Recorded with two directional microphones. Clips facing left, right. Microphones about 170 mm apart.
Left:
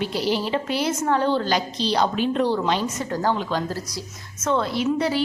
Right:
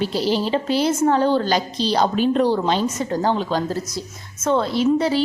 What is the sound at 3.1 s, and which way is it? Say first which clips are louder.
A woman's voice: right 2 dB; 25° right (ahead or behind).